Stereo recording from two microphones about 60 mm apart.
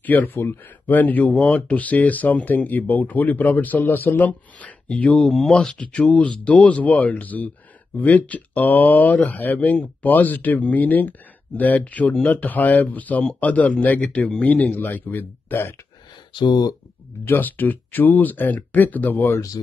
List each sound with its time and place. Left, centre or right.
0.0 s speech: left
5.3 s speech: centre; by 14.0 s left
14.0 s speech: centre
14.4 s speech: left
17.3 s speech: left